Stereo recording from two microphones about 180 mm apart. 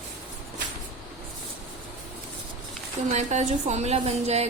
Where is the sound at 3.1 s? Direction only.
40° right (ahead or behind).